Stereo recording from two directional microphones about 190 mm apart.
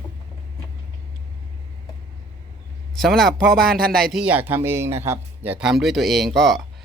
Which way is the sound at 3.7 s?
50° right (ahead or behind).